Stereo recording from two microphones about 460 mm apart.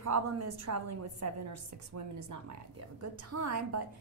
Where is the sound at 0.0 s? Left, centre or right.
Right.